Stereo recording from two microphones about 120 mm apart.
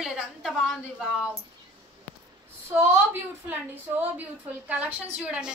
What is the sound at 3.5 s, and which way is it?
A woman's voice, 15° right (ahead or behind).